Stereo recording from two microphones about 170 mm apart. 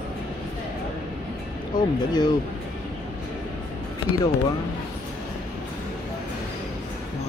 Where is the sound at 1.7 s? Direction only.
25° left (ahead or behind).